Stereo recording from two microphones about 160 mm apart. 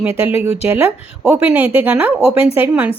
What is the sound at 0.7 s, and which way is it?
A woman's voice, 15° right (ahead or behind).